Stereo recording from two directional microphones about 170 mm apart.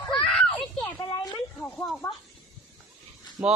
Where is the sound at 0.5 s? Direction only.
25° left (ahead or behind).